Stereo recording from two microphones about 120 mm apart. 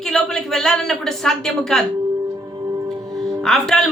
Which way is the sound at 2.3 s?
35° right (ahead or behind).